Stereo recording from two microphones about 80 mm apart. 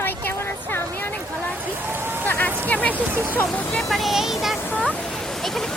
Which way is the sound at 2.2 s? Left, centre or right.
Left.